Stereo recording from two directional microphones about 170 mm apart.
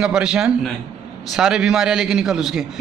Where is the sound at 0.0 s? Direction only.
5° right (ahead or behind).